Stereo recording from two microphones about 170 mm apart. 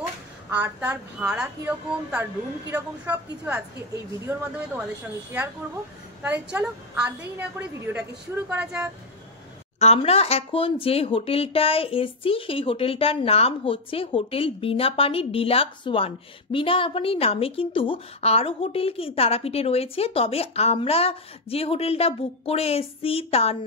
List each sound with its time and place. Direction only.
0.5 s a woman's voice: 10° right (ahead or behind)
6.2 s a woman's voice: 10° right (ahead or behind)
9.8 s a woman's voice: 35° left (ahead or behind)